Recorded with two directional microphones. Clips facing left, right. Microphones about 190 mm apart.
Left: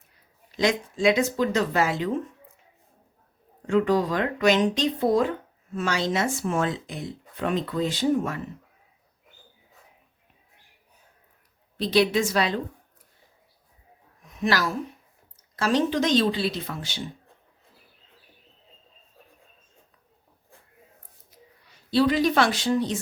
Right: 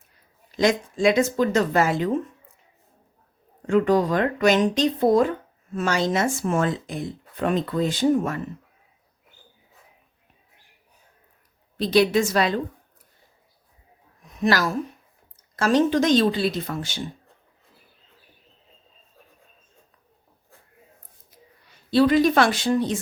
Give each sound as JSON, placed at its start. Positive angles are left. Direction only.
{"t": 0.5, "sound": "speech", "side_deg": -45}
{"t": 3.7, "sound": "speech", "side_deg": -45}
{"t": 11.8, "sound": "speech", "side_deg": -45}
{"t": 14.5, "sound": "speech", "side_deg": -45}
{"t": 21.8, "sound": "speech", "side_deg": -50}